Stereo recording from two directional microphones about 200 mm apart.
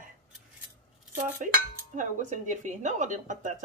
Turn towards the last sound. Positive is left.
turn(degrees=-40)  # may be behind; listen again after turning